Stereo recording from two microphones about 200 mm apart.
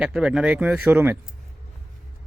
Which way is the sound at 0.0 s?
5° right (ahead or behind).